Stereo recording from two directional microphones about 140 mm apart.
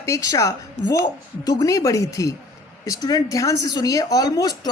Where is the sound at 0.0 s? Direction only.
25° left (ahead or behind).